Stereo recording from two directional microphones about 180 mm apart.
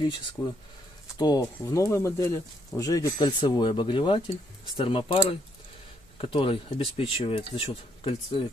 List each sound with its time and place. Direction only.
0.4 s speech: 20° left (ahead or behind)
6.2 s speech: 30° left (ahead or behind)